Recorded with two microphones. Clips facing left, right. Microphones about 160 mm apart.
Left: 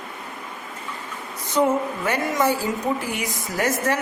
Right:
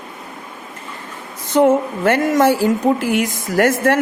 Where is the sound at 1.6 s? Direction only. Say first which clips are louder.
Right 9 dB; 85° right.